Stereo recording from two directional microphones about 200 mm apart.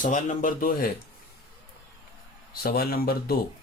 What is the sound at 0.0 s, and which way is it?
Speech, 40° left (ahead or behind).